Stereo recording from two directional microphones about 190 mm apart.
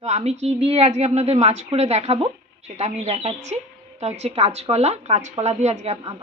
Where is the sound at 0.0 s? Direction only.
35° right (ahead or behind).